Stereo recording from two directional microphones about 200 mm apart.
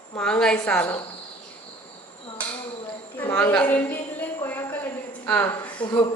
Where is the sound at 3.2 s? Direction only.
10° left (ahead or behind).